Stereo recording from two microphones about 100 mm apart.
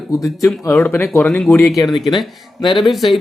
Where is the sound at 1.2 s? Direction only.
10° left (ahead or behind).